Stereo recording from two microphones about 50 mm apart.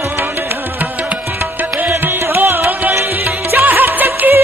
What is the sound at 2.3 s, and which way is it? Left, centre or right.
Music, right.